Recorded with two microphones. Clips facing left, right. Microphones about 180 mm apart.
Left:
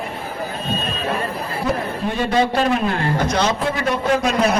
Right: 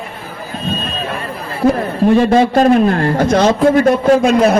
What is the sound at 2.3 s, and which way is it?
A man's voice, 45° right (ahead or behind).